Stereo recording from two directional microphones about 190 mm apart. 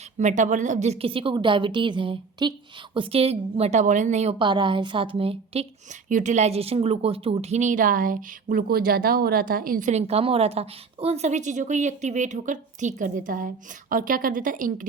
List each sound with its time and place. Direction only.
0.2 s a woman's voice: 40° right (ahead or behind)